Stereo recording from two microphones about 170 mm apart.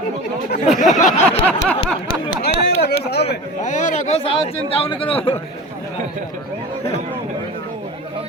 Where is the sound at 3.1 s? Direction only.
75° left (ahead or behind).